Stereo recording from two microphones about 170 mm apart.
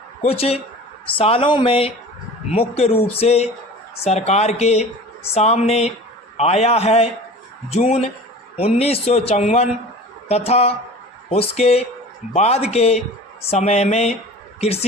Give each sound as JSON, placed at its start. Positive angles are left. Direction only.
{"t": 0.2, "sound": "a man's voice", "side_deg": 35}